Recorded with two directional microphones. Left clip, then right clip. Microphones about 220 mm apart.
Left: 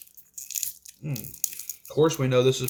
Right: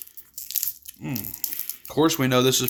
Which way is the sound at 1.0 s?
60° right (ahead or behind).